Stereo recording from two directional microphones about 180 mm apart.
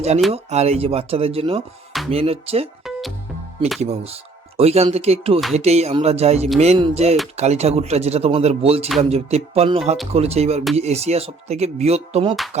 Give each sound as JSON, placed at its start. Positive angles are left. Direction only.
{"t": 0.5, "sound": "speech", "side_deg": -35}
{"t": 2.8, "sound": "music", "side_deg": 0}
{"t": 3.8, "sound": "speech", "side_deg": -35}